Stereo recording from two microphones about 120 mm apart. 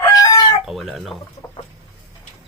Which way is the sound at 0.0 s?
30° left (ahead or behind).